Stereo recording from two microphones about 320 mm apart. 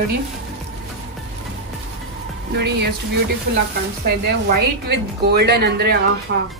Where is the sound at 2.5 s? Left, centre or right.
Right.